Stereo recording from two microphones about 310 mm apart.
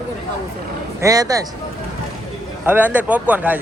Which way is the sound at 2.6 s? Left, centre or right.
Centre.